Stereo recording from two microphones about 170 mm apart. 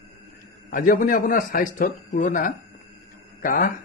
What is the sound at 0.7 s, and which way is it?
Speech, 55° left (ahead or behind).